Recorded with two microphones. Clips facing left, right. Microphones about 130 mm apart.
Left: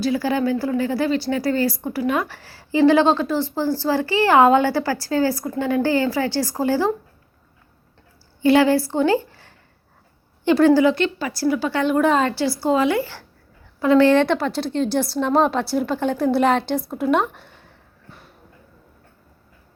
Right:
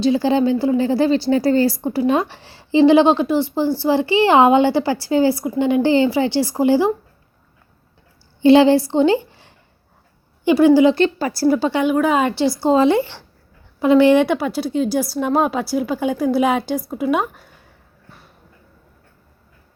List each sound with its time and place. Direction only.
0.0 s a woman's voice: 25° right (ahead or behind)
8.4 s speech: 25° right (ahead or behind)
10.4 s a woman's voice: 10° right (ahead or behind)
10.9 s a woman's voice: 35° right (ahead or behind)
11.7 s a woman's voice: 15° right (ahead or behind)
12.5 s a woman's voice: 30° right (ahead or behind); by 17.7 s centre (ahead or behind)